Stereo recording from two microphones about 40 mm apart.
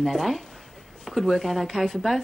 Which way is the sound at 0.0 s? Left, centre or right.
Centre.